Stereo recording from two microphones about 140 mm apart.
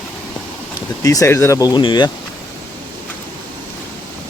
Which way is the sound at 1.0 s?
25° left (ahead or behind).